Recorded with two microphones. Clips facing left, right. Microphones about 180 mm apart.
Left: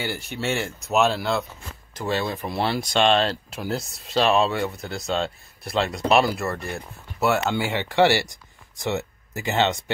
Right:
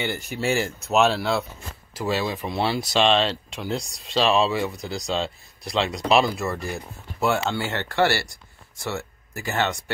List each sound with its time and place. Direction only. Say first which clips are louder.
0.0 s speech: right 2 dB; 5° left (ahead or behind)